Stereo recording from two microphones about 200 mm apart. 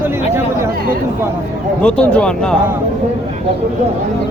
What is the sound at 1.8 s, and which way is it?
Speech, 5° left (ahead or behind).